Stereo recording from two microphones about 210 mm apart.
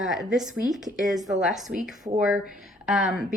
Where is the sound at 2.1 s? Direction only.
20° right (ahead or behind).